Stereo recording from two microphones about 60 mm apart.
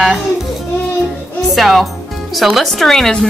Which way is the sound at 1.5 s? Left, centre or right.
Centre.